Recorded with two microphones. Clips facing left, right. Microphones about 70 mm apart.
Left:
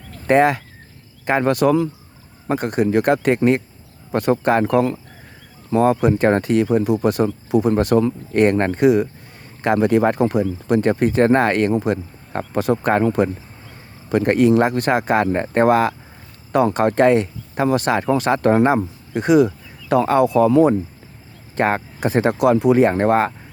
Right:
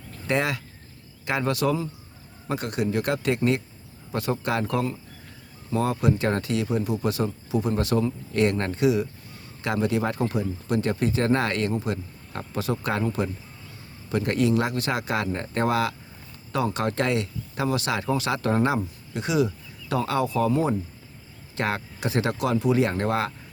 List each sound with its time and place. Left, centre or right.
0.3 s speech: left
2.5 s speech: left
21.5 s speech: left
22.8 s speech: left